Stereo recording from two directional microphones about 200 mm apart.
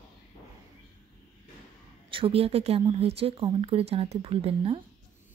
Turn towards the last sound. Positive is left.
turn(degrees=-30)  # may be behind; listen again after turning